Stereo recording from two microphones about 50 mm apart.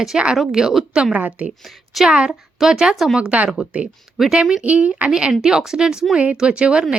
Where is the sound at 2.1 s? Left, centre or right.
Centre.